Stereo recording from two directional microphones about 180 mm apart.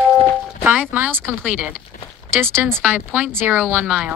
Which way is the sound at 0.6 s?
10° right (ahead or behind).